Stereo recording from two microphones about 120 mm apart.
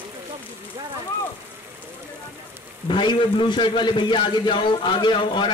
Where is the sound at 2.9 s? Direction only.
45° left (ahead or behind).